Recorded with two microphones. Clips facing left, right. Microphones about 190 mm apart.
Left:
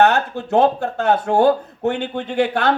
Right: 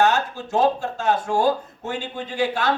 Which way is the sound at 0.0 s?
60° left (ahead or behind).